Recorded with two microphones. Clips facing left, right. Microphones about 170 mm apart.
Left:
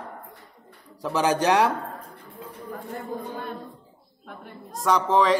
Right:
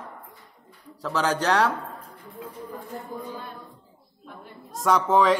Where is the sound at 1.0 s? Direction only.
15° left (ahead or behind).